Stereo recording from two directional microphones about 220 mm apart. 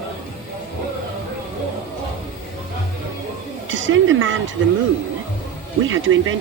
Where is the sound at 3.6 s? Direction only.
60° right (ahead or behind).